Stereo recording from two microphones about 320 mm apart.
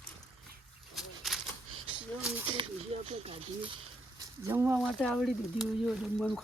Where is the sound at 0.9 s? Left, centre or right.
Centre.